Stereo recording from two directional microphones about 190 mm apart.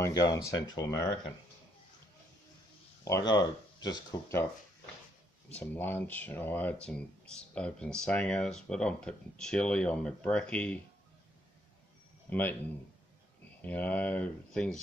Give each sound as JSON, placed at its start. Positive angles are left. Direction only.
{"t": 0.3, "sound": "speech", "side_deg": 20}
{"t": 3.3, "sound": "speech", "side_deg": 20}
{"t": 5.5, "sound": "speech", "side_deg": 10}
{"t": 12.3, "sound": "a man's voice", "side_deg": 10}
{"t": 13.6, "sound": "speech", "side_deg": 10}